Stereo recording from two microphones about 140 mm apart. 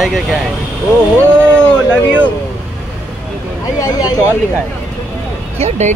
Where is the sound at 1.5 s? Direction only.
10° left (ahead or behind).